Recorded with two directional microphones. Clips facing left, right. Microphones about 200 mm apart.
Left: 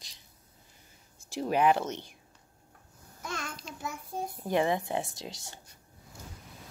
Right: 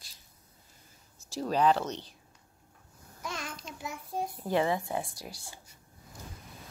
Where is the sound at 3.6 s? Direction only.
35° left (ahead or behind).